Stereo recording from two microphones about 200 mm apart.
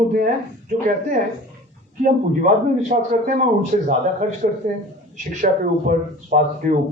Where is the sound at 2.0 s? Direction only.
40° right (ahead or behind).